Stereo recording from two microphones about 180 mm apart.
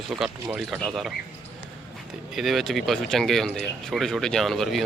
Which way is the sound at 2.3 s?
Centre (ahead or behind).